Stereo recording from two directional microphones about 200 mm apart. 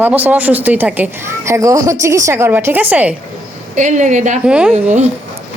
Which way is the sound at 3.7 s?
40° right (ahead or behind).